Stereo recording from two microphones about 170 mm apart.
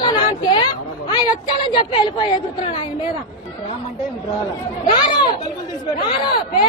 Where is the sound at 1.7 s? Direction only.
30° left (ahead or behind).